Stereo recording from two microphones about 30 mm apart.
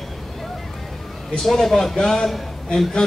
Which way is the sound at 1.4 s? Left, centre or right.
Centre.